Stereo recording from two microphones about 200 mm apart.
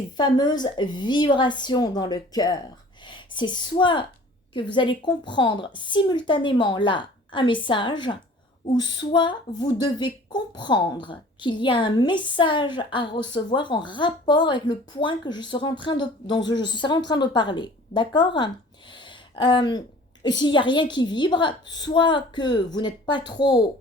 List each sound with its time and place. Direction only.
0.2 s a woman's voice: 20° left (ahead or behind)